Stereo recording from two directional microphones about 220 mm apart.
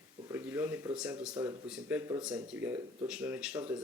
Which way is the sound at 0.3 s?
10° right (ahead or behind).